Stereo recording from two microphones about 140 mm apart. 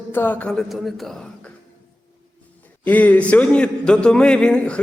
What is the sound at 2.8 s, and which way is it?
A man's voice, 10° left (ahead or behind).